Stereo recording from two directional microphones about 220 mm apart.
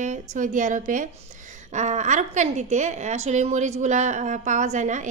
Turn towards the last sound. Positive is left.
turn(degrees=-35)  # may be behind; listen again after turning